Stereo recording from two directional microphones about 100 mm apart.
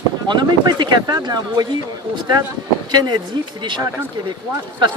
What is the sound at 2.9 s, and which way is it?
Speech, 45° right (ahead or behind).